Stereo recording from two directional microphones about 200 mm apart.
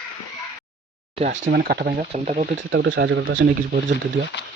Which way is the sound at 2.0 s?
35° right (ahead or behind).